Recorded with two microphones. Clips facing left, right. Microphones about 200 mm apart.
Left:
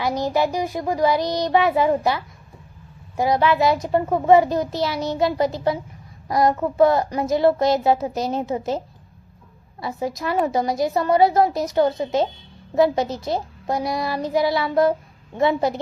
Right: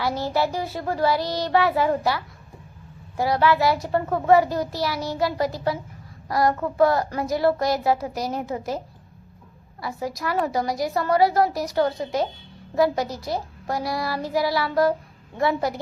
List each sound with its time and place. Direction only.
0.0 s child singing: 15° left (ahead or behind)
3.2 s a child's voice: 20° left (ahead or behind)
9.8 s a child's voice: 20° left (ahead or behind)